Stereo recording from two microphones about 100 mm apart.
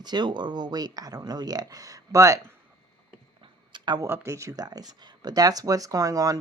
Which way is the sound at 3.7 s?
45° right (ahead or behind).